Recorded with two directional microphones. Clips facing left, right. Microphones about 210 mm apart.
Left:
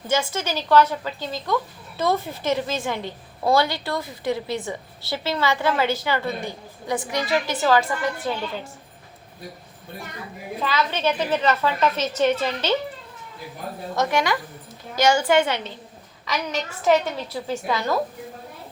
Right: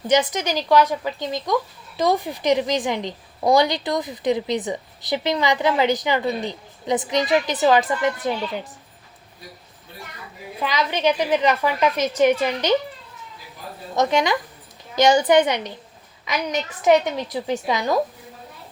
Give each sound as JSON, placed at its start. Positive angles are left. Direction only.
{"t": 0.1, "sound": "a woman's voice", "side_deg": -15}
{"t": 10.6, "sound": "a woman's voice", "side_deg": -15}
{"t": 13.9, "sound": "a woman's voice", "side_deg": -20}